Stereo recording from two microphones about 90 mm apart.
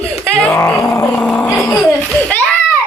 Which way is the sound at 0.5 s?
25° left (ahead or behind).